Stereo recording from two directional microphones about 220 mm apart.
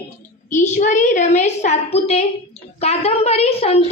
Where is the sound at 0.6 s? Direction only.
35° left (ahead or behind).